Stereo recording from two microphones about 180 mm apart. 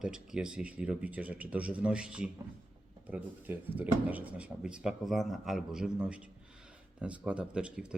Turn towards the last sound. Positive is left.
turn(degrees=-5)  # may be behind; listen again after turning